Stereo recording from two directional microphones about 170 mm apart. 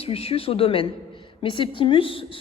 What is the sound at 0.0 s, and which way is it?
A woman's voice, 35° left (ahead or behind).